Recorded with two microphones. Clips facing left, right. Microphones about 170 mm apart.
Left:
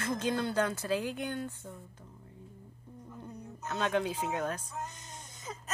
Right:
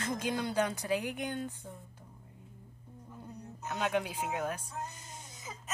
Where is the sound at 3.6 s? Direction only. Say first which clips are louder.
Left 2 dB; 15° right (ahead or behind).